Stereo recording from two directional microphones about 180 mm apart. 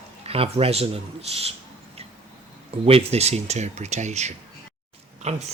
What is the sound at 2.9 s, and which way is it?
Speech, 35° right (ahead or behind).